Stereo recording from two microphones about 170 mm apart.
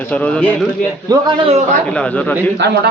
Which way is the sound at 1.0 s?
30° right (ahead or behind).